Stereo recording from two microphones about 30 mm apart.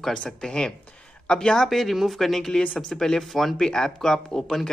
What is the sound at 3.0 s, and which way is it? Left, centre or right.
Speech, left.